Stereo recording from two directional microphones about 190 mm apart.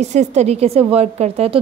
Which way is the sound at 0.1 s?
35° right (ahead or behind).